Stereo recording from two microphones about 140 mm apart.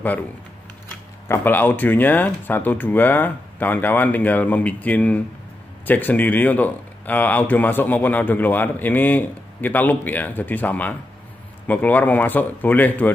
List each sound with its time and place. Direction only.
1.3 s speech: 15° left (ahead or behind)